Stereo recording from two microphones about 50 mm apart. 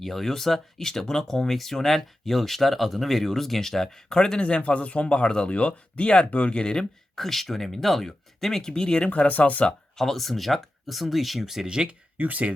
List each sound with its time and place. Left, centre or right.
0.0 s speech: centre
7.2 s speech: centre
9.0 s speech: left
10.0 s speech: centre
11.7 s speech: centre
12.1 s speech: right